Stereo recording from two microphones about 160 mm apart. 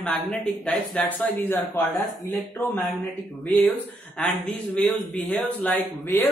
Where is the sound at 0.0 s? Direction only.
5° left (ahead or behind).